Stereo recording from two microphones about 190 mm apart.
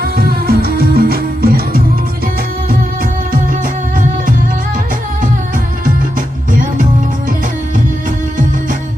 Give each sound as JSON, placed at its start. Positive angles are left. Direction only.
{"t": 0.0, "sound": "music", "side_deg": -50}
{"t": 5.8, "sound": "music", "side_deg": -45}